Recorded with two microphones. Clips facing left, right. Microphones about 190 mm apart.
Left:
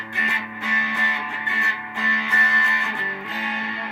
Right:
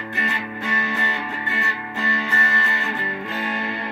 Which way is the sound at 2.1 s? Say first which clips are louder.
Right 2 dB; 40° right (ahead or behind).